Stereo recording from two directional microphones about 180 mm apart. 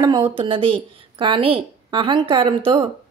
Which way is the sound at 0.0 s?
25° right (ahead or behind).